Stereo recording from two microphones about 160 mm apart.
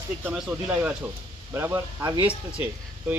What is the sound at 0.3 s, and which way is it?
Speech, 5° right (ahead or behind).